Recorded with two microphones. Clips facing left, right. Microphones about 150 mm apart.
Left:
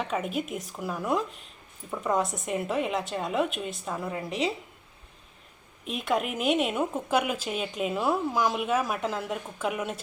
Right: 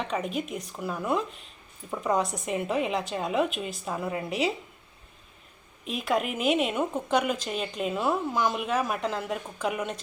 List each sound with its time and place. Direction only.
0.0 s a woman's voice: centre (ahead or behind)
5.8 s a woman's voice: centre (ahead or behind)